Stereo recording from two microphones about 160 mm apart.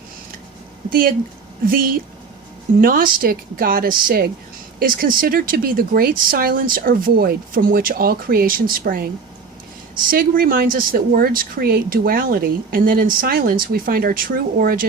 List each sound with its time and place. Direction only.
1.6 s speech: 65° right (ahead or behind)
10.1 s speech: 65° right (ahead or behind)